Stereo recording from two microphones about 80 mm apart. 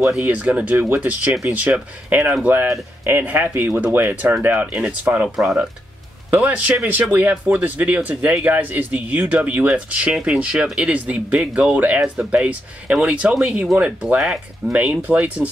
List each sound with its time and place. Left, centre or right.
0.2 s speech: right
5.3 s speech: centre
6.3 s speech: centre
14.0 s speech: centre
14.7 s speech: centre